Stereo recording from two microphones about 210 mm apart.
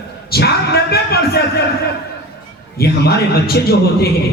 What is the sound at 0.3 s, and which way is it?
Speech, 50° left (ahead or behind).